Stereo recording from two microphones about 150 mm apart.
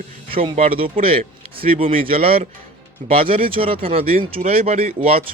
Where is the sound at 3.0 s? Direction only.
55° right (ahead or behind).